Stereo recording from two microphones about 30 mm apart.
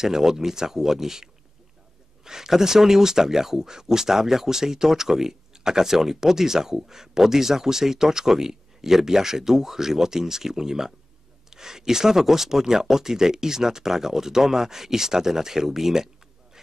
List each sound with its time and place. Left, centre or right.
0.0 s speech: centre